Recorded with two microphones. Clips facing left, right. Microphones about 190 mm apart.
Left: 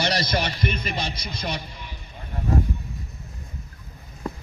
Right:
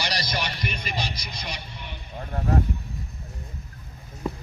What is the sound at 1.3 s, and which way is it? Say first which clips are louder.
Speech: left 6 dB; 55° left (ahead or behind).